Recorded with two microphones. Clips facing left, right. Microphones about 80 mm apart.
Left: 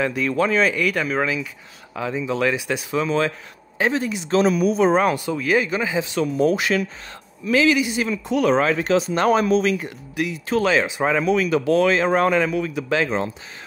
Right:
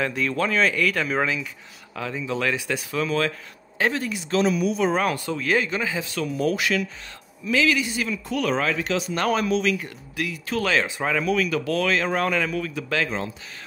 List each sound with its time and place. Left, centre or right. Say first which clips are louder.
0.0 s speech: left 4 dB; centre
2.0 s speech: left 4 dB; centre
4.3 s speech: left 4 dB; left
7.6 s speech: left 4 dB; centre